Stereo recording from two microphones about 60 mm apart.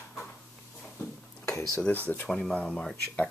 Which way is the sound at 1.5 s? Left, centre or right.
Left.